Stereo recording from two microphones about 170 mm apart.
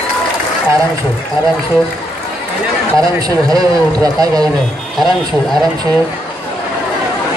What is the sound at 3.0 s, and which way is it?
A man's voice, 20° right (ahead or behind).